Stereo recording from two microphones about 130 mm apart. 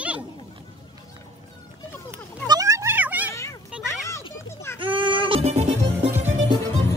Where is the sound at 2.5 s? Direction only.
25° right (ahead or behind).